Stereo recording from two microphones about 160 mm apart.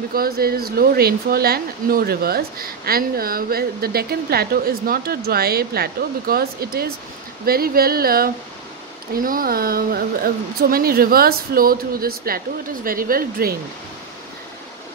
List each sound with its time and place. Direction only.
0.1 s speech: 70° right (ahead or behind)